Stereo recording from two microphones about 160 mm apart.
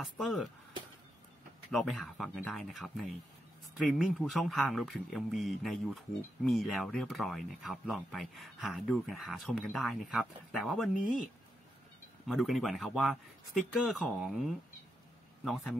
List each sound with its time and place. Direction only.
0.0 s speech: centre (ahead or behind)
1.7 s speech: centre (ahead or behind)
11.0 s speech: 55° left (ahead or behind)
12.3 s speech: centre (ahead or behind)